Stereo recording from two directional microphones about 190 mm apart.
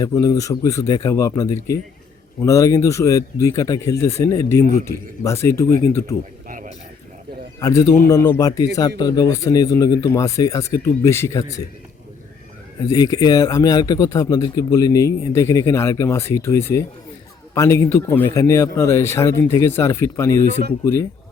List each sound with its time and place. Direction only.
0.0 s speech: 20° left (ahead or behind)
7.6 s a man's voice: 20° left (ahead or behind)
12.9 s a man's voice: 20° left (ahead or behind)